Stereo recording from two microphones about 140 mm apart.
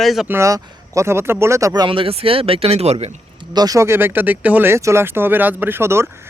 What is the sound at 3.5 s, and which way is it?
Speech, 30° right (ahead or behind).